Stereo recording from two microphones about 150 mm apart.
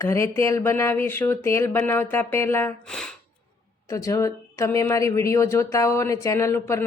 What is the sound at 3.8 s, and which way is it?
Speech, 20° left (ahead or behind).